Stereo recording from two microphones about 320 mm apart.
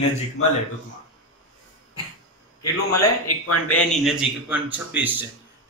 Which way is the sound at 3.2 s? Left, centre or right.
Left.